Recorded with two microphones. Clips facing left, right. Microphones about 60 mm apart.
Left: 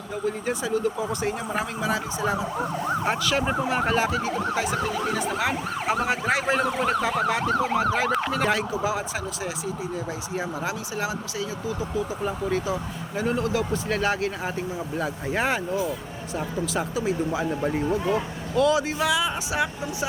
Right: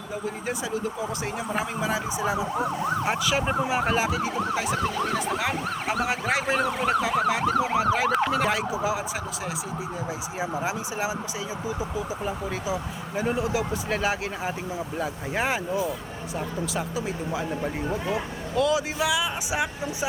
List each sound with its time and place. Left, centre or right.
0.3 s speech: centre
10.3 s speech: centre
19.5 s speech: centre